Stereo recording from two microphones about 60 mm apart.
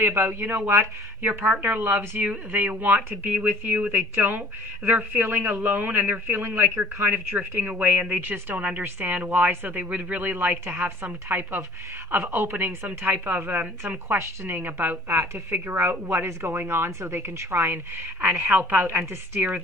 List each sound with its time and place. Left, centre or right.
0.0 s speech: right
1.2 s a woman's voice: right
3.3 s speech: right
4.1 s a woman's voice: right
4.4 s a woman's voice: right
14.1 s a woman's voice: right
18.5 s a woman's voice: right